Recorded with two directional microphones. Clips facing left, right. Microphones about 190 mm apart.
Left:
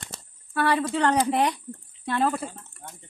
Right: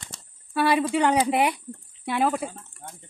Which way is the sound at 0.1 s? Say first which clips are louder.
Left 5 dB; 60° left (ahead or behind).